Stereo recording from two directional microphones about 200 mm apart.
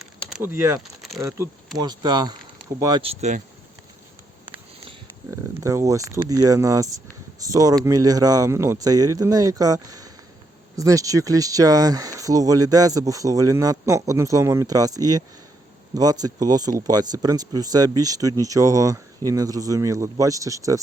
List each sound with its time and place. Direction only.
0.0 s a sound: centre (ahead or behind)
1.8 s speech: 20° right (ahead or behind)
5.3 s speech: 15° right (ahead or behind)